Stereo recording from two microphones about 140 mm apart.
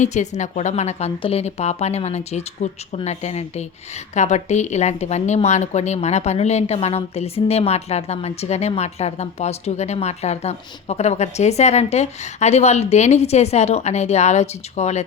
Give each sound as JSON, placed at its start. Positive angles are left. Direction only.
{"t": 0.0, "sound": "a woman's voice", "side_deg": 55}